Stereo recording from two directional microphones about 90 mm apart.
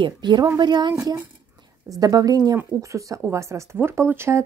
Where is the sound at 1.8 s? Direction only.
40° right (ahead or behind).